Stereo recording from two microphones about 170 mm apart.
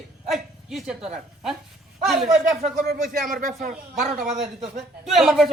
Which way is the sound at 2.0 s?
Centre (ahead or behind).